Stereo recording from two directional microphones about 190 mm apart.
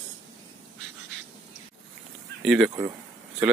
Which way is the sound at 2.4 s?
Centre (ahead or behind).